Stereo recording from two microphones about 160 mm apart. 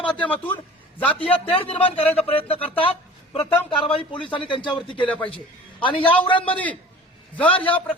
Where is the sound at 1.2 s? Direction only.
35° left (ahead or behind).